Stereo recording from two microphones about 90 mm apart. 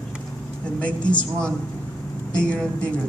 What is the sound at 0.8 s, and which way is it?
A woman's voice, 15° left (ahead or behind).